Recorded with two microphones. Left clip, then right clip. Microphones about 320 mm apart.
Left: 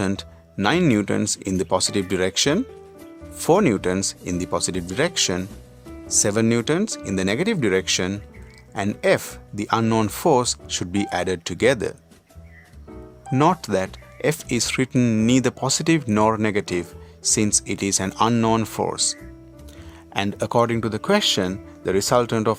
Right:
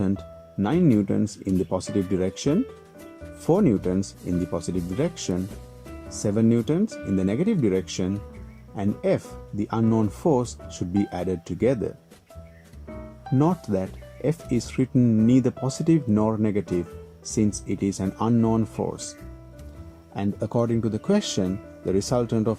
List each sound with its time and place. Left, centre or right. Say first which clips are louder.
0.0 s speech: left 3 dB; left
13.7 s speech: left 5 dB; left
15.3 s speech: left 3 dB; left
20.1 s speech: left 6 dB; left